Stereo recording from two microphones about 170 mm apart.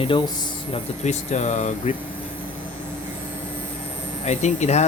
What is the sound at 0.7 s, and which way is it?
Speech, 45° left (ahead or behind).